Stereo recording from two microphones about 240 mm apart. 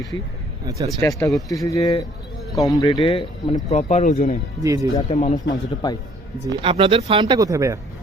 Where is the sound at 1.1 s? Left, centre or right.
Centre.